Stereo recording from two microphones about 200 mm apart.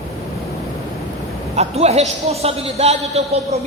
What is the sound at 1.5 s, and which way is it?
A woman's voice, 30° right (ahead or behind).